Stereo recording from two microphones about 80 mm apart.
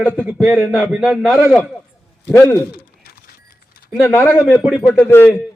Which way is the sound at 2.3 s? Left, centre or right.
Left.